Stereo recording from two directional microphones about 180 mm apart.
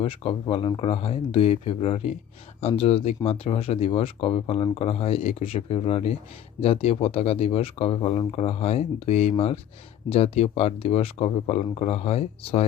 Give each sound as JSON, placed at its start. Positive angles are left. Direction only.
{"t": 0.0, "sound": "speech", "side_deg": 30}